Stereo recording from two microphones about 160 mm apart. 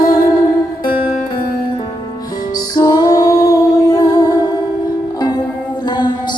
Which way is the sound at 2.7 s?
25° left (ahead or behind).